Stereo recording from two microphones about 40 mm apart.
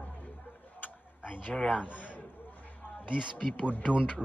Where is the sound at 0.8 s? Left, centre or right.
Left.